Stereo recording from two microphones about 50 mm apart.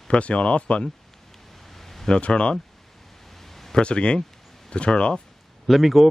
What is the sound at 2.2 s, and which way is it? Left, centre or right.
Speech, left.